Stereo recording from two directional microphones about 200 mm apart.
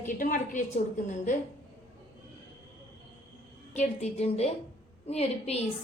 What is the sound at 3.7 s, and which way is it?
A woman's voice, 35° left (ahead or behind).